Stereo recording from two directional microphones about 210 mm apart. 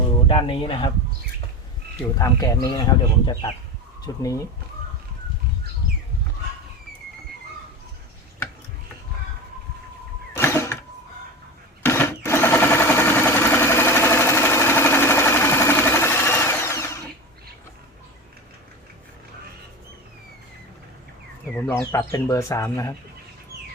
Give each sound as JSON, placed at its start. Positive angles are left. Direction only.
{"t": 0.1, "sound": "speech", "side_deg": 25}
{"t": 2.1, "sound": "speech", "side_deg": 15}
{"t": 10.3, "sound": "a sound", "side_deg": 15}
{"t": 11.8, "sound": "sewing machine", "side_deg": 10}
{"t": 21.5, "sound": "bird", "side_deg": 15}
{"t": 22.1, "sound": "speech", "side_deg": 15}